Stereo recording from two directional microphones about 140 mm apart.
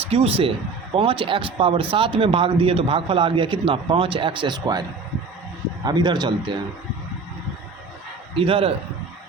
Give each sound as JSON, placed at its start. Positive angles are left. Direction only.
{"t": 0.1, "sound": "speech", "side_deg": -45}
{"t": 8.4, "sound": "speech", "side_deg": -40}